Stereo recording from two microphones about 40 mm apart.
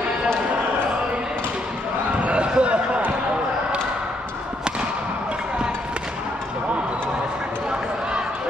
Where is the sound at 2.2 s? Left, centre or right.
Right.